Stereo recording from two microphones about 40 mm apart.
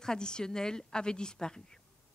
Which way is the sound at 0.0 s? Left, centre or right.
Centre.